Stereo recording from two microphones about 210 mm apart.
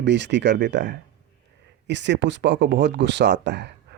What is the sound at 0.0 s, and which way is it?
Speech, 55° right (ahead or behind).